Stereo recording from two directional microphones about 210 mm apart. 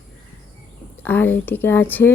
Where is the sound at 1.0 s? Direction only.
10° left (ahead or behind).